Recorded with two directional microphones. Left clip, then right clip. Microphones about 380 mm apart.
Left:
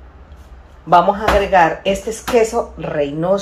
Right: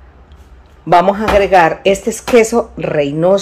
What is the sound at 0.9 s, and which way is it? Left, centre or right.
Speech, right.